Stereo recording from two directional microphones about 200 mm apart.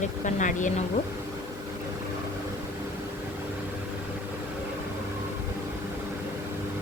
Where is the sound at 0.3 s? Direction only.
40° left (ahead or behind).